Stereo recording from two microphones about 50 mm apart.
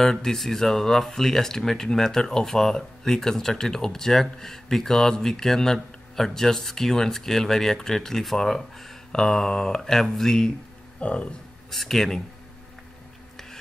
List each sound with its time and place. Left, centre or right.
0.0 s speech: centre
11.0 s speech: left
11.7 s speech: centre